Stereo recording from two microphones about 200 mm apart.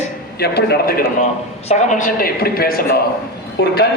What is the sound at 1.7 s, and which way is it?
A man's voice, 35° left (ahead or behind).